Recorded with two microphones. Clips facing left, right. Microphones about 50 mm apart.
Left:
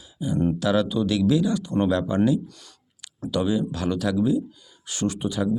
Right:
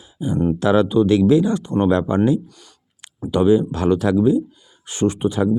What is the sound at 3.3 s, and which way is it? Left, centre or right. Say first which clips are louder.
Speech: right 8 dB; right.